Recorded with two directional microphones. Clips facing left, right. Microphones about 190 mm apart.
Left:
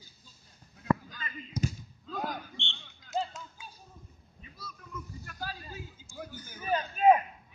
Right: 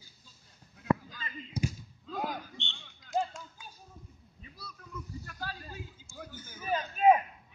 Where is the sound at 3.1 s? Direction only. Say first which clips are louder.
Right 2 dB; centre (ahead or behind).